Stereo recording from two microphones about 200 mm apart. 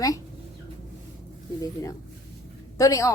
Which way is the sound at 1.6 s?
15° left (ahead or behind).